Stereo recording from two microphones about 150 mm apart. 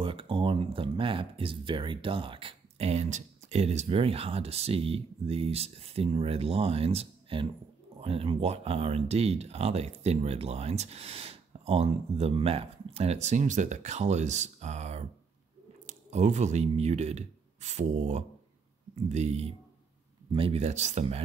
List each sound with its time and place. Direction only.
0.0 s speech: 35° right (ahead or behind)